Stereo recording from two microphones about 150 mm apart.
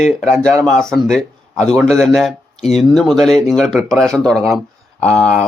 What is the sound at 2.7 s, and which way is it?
Speech, centre (ahead or behind).